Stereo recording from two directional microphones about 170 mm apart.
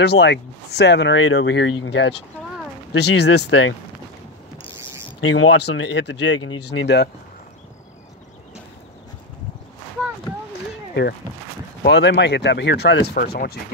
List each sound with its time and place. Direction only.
0.0 s speech: 80° left
3.0 s speech: 80° left
5.3 s speech: 90° left
11.8 s speech: 85° left; by 13.6 s 65° left (ahead or behind)